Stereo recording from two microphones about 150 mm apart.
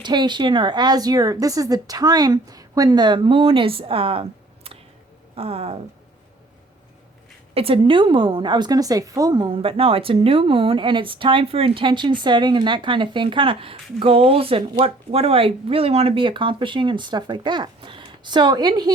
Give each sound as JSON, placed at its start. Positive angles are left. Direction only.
{"t": 0.0, "sound": "a woman's voice", "side_deg": -30}
{"t": 7.5, "sound": "a woman's voice", "side_deg": -40}